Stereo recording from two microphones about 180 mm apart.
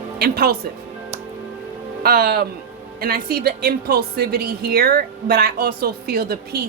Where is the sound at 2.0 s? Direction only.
55° right (ahead or behind).